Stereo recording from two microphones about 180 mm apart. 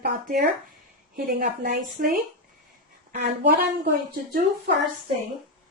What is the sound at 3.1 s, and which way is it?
Speech, 55° right (ahead or behind).